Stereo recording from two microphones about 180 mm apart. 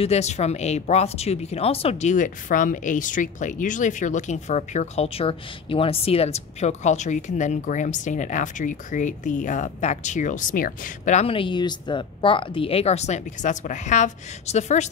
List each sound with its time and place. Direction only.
0.0 s speech: 35° left (ahead or behind)